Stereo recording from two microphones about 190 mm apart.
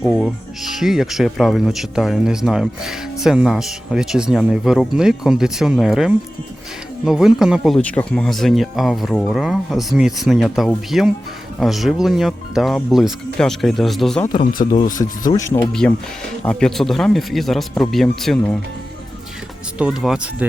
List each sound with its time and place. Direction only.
0.0 s speech: centre (ahead or behind)
14.6 s speech: 45° left (ahead or behind)
15.4 s speech: 15° left (ahead or behind)
19.8 s speech: centre (ahead or behind)